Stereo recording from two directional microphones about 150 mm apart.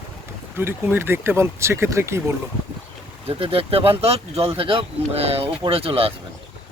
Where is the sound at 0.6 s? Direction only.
15° right (ahead or behind).